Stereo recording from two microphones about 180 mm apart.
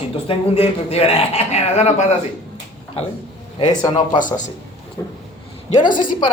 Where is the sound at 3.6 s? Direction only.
25° left (ahead or behind).